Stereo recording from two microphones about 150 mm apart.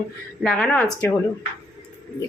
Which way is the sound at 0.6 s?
15° left (ahead or behind).